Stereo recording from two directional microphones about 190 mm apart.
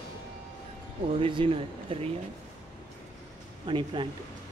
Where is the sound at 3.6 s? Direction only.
25° right (ahead or behind).